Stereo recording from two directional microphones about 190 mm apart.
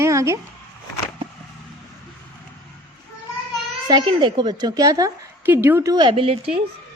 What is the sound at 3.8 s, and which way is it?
A woman's voice, 25° right (ahead or behind).